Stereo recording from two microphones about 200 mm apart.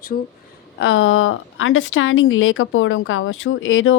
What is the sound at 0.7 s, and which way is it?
Speech, 70° left (ahead or behind).